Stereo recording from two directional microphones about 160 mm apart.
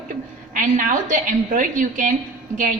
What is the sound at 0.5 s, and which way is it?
A woman's voice, 55° right (ahead or behind).